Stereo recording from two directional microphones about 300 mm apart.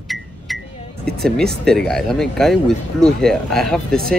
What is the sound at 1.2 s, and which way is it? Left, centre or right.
Speech, centre.